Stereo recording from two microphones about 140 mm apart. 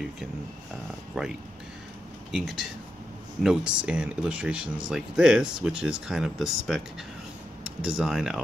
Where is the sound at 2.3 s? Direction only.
Centre (ahead or behind).